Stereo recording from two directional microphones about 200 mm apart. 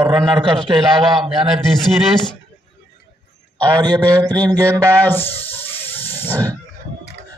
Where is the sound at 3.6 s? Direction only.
20° right (ahead or behind).